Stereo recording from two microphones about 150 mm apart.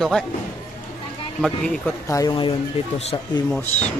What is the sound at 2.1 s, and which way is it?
Speech, 25° left (ahead or behind).